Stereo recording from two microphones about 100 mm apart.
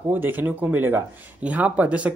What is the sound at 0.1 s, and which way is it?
Speech, 20° right (ahead or behind).